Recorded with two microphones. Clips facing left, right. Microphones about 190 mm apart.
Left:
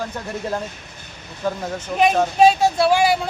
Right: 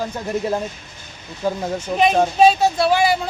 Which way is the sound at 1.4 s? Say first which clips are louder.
Right 2 dB; 10° right (ahead or behind).